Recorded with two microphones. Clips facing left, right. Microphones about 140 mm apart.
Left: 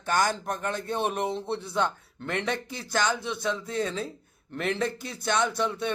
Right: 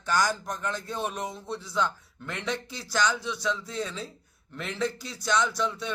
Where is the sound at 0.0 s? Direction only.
55° left (ahead or behind).